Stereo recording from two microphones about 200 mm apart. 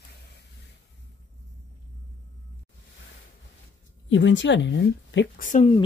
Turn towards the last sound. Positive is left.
turn(degrees=40)  # may be behind; listen again after turning